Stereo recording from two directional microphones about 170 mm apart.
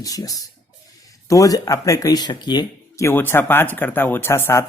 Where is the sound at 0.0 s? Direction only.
20° left (ahead or behind).